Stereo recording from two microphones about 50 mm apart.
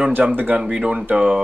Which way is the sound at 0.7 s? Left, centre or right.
Right.